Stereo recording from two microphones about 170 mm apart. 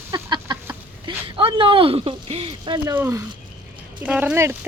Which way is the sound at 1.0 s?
30° right (ahead or behind).